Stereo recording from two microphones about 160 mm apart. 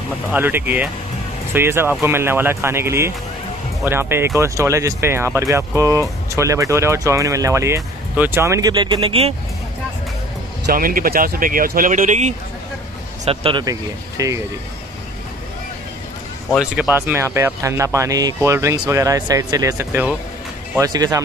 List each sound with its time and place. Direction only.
0.3 s speech: 15° right (ahead or behind); by 9.3 s 35° right (ahead or behind)
10.7 s speech: 60° right (ahead or behind)
13.2 s speech: 35° right (ahead or behind)
16.4 s speech: centre (ahead or behind)
16.9 s speech: 15° right (ahead or behind)